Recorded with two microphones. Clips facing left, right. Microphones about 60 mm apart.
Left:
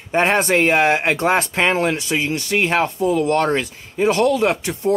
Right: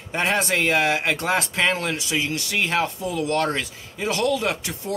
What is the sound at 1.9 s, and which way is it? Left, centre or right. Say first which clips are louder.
Speech: left 4 dB; left.